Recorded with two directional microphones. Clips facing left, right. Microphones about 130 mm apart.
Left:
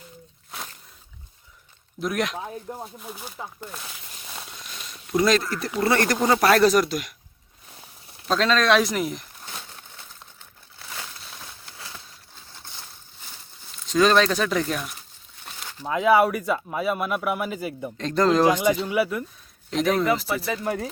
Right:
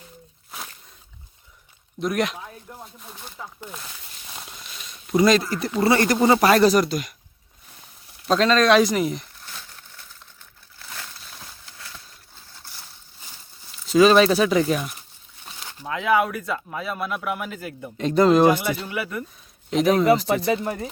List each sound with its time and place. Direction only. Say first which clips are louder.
2.0 s speech: right 2 dB; centre (ahead or behind)
2.4 s speech: left 6 dB; 30° left (ahead or behind)
3.0 s speech: left 3 dB; 5° left (ahead or behind)
5.1 s speech: right 3 dB; centre (ahead or behind)
8.3 s speech: right 3 dB; centre (ahead or behind)
9.5 s a sound: left 3 dB; 30° left (ahead or behind)
13.2 s a sound: left 1 dB; 5° right (ahead or behind)
15.8 s speech: left 3 dB; 10° left (ahead or behind)
17.9 s speech: right 4 dB; 10° right (ahead or behind)
18.9 s speech: left 5 dB; 10° left (ahead or behind)
19.7 s speech: right 4 dB; centre (ahead or behind)